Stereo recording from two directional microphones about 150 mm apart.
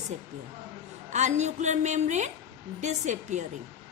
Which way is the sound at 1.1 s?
50° right (ahead or behind).